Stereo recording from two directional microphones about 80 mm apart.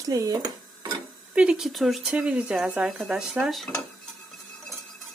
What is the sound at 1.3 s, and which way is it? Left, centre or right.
Speech, centre.